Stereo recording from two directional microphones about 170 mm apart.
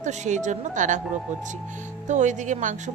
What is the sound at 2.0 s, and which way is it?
Speech, 45° right (ahead or behind).